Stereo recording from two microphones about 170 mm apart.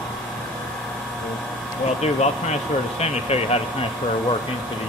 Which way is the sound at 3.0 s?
40° left (ahead or behind).